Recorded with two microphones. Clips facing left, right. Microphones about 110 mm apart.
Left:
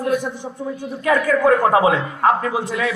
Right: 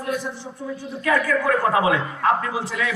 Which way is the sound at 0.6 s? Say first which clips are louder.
Left 4 dB; 20° left (ahead or behind).